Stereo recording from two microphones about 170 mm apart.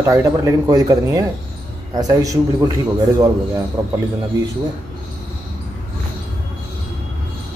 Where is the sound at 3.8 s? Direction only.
15° right (ahead or behind).